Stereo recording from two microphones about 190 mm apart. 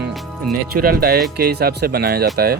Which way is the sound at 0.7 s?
50° right (ahead or behind).